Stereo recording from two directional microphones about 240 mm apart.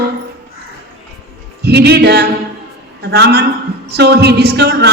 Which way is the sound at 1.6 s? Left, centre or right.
Right.